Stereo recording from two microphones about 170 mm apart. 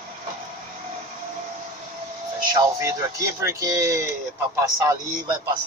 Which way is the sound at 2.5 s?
20° right (ahead or behind).